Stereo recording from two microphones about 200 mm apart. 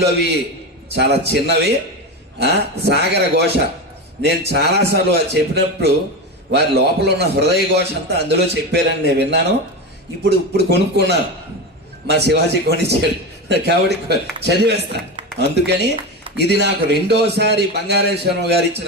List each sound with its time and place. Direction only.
0.9 s a man's voice: 55° right (ahead or behind)